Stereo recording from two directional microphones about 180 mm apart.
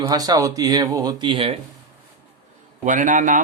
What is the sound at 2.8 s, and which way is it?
Speech, 45° right (ahead or behind).